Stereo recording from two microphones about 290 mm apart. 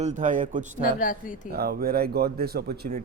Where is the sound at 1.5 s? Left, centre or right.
Right.